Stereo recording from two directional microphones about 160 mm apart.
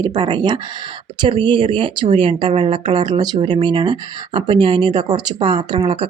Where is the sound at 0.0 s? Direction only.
25° right (ahead or behind).